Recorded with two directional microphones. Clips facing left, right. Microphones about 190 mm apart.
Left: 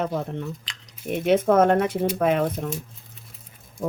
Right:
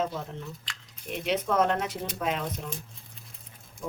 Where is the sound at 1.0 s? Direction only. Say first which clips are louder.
Left 9 dB; 50° left (ahead or behind).